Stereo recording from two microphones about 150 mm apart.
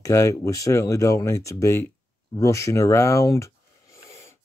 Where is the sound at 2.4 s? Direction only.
20° left (ahead or behind).